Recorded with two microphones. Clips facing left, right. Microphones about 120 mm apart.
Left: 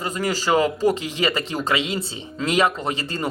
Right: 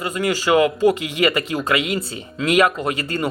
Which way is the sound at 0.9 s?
30° left (ahead or behind).